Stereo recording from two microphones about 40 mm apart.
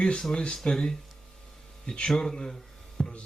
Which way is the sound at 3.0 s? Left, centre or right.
Left.